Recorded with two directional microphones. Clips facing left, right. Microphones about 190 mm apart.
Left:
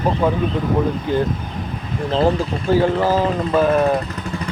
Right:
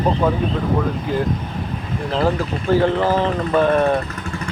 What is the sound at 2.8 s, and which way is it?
Speech, 10° left (ahead or behind).